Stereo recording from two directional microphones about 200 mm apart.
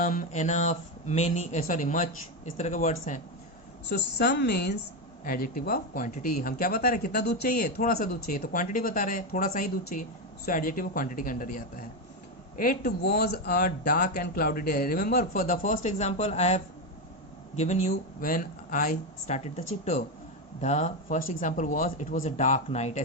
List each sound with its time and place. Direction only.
0.0 s speech: 40° left (ahead or behind)
3.8 s a woman's voice: 60° left (ahead or behind)
5.2 s speech: 45° left (ahead or behind)